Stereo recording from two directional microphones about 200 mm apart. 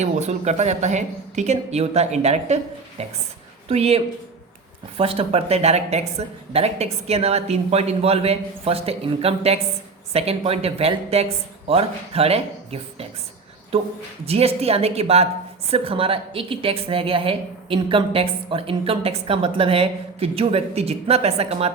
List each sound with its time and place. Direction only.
0.0 s a woman's voice: 35° right (ahead or behind)